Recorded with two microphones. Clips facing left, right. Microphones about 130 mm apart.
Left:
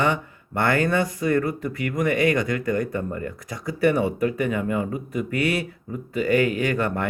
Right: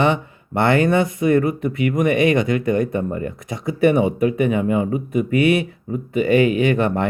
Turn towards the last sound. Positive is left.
turn(degrees=-20)  # may be behind; listen again after turning